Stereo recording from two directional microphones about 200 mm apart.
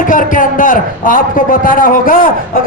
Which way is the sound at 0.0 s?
40° left (ahead or behind).